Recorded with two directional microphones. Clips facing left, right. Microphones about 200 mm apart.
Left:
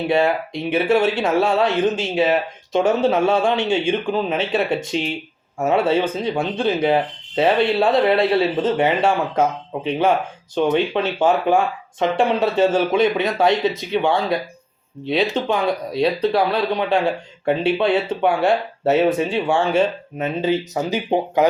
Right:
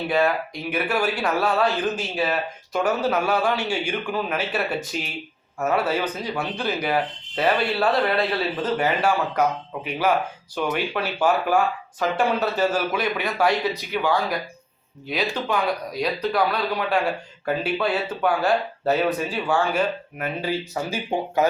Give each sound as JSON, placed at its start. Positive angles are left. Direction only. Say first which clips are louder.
{"t": 0.1, "sound": "speech", "louder": "left 3 dB", "side_deg": 25}